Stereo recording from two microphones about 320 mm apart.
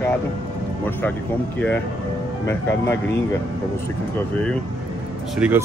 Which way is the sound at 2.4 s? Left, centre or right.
Centre.